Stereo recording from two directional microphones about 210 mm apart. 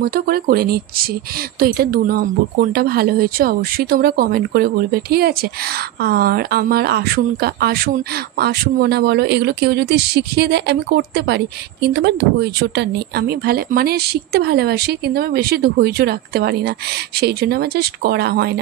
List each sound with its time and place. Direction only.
0.0 s speech: 45° right (ahead or behind)